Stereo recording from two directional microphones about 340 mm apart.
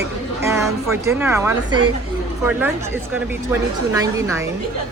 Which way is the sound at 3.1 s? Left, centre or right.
Centre.